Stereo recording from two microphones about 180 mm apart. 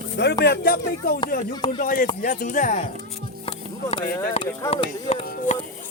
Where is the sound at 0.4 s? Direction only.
60° left (ahead or behind); by 2.8 s 45° left (ahead or behind).